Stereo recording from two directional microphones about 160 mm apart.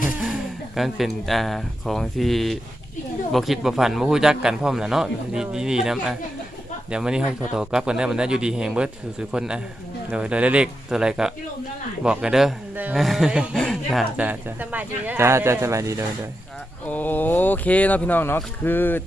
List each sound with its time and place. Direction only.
0.8 s a man's voice: centre (ahead or behind)
14.2 s speech: 10° right (ahead or behind)
16.8 s speech: 10° left (ahead or behind)